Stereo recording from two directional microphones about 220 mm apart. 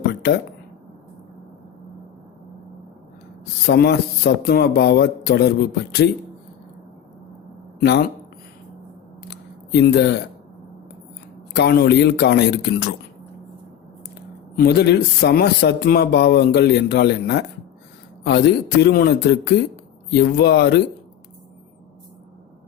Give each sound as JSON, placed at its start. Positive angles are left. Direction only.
{"t": 0.1, "sound": "a sound", "side_deg": 50}
{"t": 3.7, "sound": "speech", "side_deg": 45}
{"t": 7.8, "sound": "speech", "side_deg": 45}
{"t": 9.3, "sound": "a sound", "side_deg": 50}
{"t": 11.5, "sound": "speech", "side_deg": 50}
{"t": 14.5, "sound": "speech", "side_deg": 45}